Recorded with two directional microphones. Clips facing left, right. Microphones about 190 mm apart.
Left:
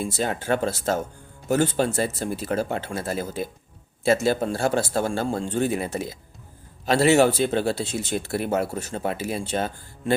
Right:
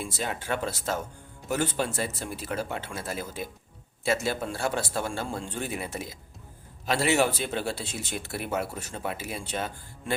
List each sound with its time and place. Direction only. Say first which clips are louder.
0.0 s speech: left 7 dB; 40° left (ahead or behind)
8.7 s speech: left 6 dB; 35° left (ahead or behind)